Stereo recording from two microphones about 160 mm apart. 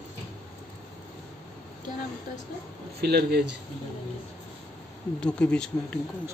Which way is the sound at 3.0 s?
90° right.